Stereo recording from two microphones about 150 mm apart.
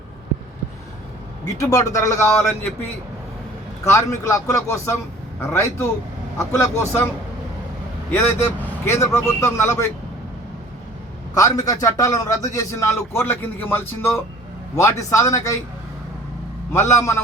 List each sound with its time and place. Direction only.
1.5 s a man's voice: 20° left (ahead or behind)
3.8 s a man's voice: 20° left (ahead or behind)
6.3 s a man's voice: 20° left (ahead or behind)
8.1 s a man's voice: 15° left (ahead or behind)
11.3 s a man's voice: 25° left (ahead or behind)
16.7 s a man's voice: 15° left (ahead or behind)